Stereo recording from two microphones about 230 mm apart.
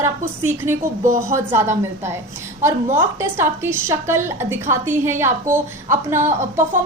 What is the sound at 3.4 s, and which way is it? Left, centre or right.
A woman's voice, centre.